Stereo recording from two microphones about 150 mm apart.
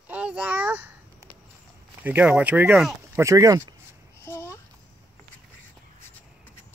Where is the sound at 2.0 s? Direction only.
10° right (ahead or behind).